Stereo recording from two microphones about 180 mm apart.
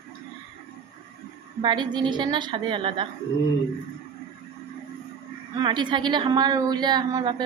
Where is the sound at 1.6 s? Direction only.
25° right (ahead or behind).